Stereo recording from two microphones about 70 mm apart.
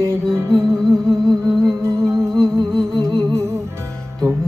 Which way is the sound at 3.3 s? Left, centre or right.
Right.